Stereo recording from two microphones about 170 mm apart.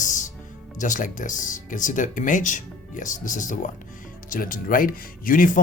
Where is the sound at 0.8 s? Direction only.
50° left (ahead or behind).